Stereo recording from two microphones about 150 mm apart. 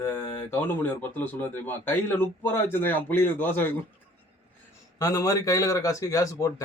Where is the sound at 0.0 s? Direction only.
15° left (ahead or behind).